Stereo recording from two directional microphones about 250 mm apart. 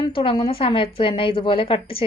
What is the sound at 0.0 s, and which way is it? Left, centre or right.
A woman's voice, left.